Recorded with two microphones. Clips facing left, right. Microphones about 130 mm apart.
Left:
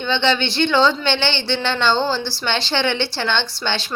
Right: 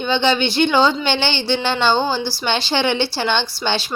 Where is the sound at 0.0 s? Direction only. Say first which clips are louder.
Right 2 dB; 10° right (ahead or behind).